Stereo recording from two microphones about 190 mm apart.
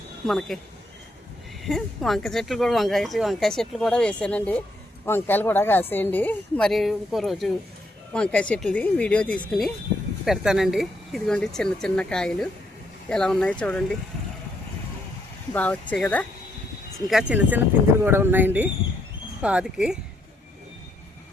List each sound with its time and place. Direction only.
0.3 s speech: centre (ahead or behind)
1.6 s speech: centre (ahead or behind)
15.5 s speech: 5° left (ahead or behind)
17.1 s speech: 5° right (ahead or behind)